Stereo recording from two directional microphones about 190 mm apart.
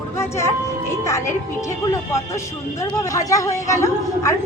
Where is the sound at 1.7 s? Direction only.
15° left (ahead or behind).